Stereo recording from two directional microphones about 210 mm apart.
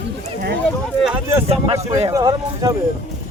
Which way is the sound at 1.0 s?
5° right (ahead or behind).